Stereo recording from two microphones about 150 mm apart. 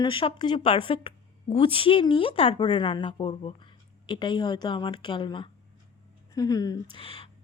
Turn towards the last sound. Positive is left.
turn(degrees=40)  # may be behind; listen again after turning